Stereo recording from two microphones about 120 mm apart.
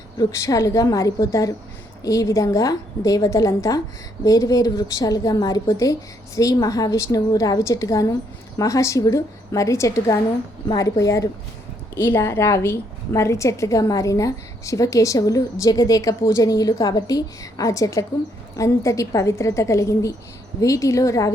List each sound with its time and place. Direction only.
0.2 s a woman's voice: 30° left (ahead or behind)